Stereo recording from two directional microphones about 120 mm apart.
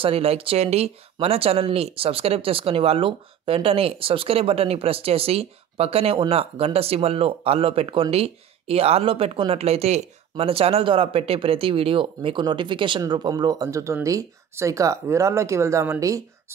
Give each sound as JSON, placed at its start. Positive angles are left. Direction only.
{"t": 0.0, "sound": "speech", "side_deg": -55}